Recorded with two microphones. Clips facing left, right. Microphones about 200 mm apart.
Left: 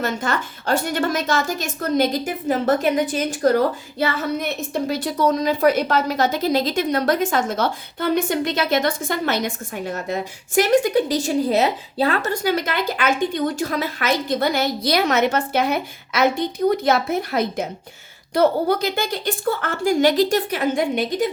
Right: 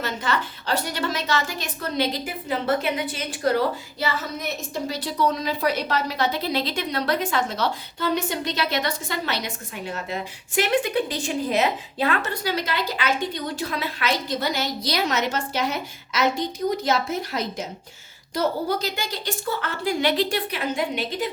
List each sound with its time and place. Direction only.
0.0 s a woman's voice: 45° left (ahead or behind)
4.0 s a woman's voice: 60° left (ahead or behind)